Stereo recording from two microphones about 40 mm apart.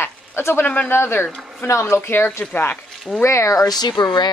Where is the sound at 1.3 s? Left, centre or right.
Centre.